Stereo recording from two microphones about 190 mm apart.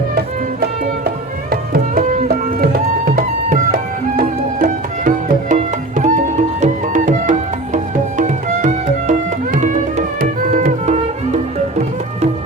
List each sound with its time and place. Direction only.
1.0 s music: 50° right (ahead or behind)